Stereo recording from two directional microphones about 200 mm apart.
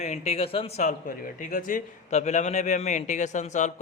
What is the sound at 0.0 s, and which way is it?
Speech, 35° left (ahead or behind).